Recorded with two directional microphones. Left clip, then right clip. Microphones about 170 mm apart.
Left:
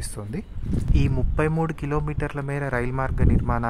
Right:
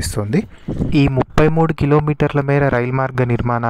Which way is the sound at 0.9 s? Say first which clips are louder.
Right 14 dB; 55° right (ahead or behind).